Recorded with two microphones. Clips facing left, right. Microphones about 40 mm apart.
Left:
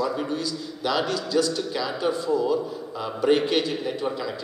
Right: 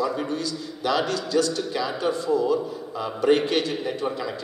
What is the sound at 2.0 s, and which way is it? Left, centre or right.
Speech, right.